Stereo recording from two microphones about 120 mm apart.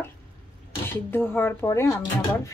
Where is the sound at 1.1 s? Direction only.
15° left (ahead or behind).